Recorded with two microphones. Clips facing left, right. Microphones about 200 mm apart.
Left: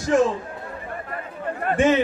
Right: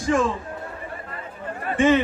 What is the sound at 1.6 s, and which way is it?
Speech, 50° left (ahead or behind).